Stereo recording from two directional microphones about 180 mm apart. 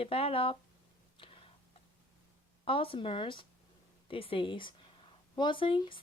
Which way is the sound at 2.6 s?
30° left (ahead or behind).